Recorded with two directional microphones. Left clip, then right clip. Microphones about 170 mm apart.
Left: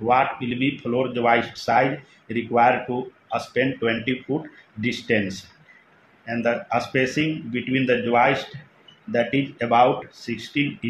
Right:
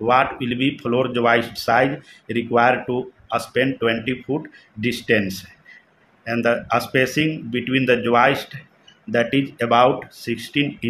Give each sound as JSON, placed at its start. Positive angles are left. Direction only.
{"t": 0.0, "sound": "speech", "side_deg": -30}